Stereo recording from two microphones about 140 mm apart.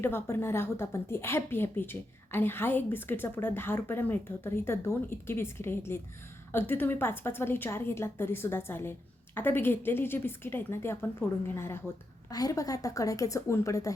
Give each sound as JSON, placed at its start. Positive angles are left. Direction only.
{"t": 0.0, "sound": "a woman's voice", "side_deg": 15}